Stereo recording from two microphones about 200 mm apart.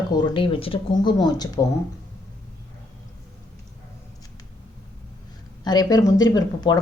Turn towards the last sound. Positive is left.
turn(degrees=20)  # may be behind; listen again after turning